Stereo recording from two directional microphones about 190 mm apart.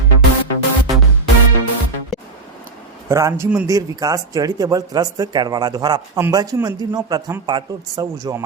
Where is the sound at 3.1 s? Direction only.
15° right (ahead or behind).